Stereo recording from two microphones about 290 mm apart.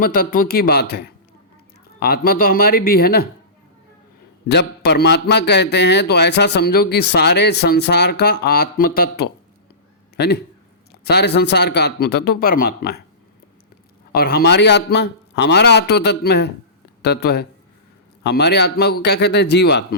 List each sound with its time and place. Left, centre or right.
0.0 s a man's voice: left
4.4 s a man's voice: left
14.1 s a man's voice: left